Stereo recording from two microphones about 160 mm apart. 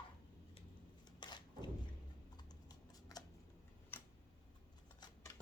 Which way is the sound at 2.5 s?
25° left (ahead or behind).